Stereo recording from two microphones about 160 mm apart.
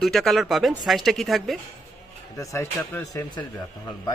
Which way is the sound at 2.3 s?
20° left (ahead or behind).